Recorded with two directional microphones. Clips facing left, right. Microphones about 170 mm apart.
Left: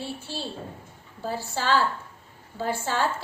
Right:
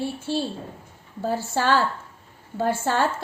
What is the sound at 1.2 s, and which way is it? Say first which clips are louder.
A woman's voice: right 5 dB; 55° right (ahead or behind).